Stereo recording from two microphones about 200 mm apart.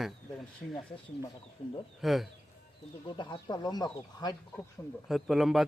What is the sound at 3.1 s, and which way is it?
Speech, 25° left (ahead or behind).